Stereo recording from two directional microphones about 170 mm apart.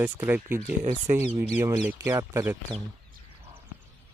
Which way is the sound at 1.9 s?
15° right (ahead or behind).